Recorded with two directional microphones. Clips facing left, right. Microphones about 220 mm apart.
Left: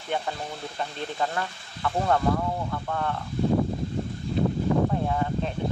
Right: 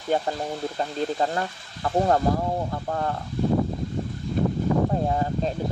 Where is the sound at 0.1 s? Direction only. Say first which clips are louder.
Right 5 dB; 35° right (ahead or behind).